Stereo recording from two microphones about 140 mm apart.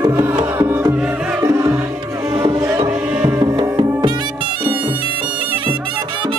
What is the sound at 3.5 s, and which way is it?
Music, 35° right (ahead or behind).